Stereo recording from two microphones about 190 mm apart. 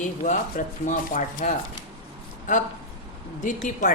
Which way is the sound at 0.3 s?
40° left (ahead or behind).